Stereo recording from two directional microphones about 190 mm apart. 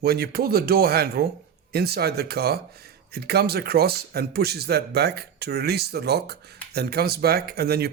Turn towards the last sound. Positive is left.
turn(degrees=-55)  # may be behind; listen again after turning